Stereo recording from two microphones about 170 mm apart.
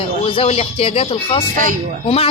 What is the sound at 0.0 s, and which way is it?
Speech, 35° left (ahead or behind).